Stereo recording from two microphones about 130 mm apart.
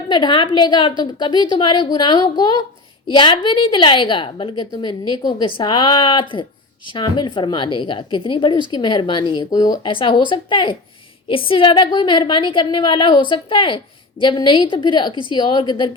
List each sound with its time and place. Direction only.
0.1 s a woman's voice: 35° left (ahead or behind)